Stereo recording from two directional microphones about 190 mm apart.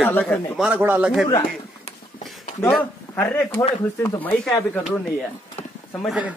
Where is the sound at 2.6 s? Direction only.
5° left (ahead or behind).